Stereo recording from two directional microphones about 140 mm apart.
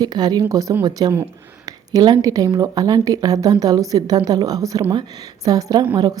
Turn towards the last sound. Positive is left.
turn(degrees=-25)  # may be behind; listen again after turning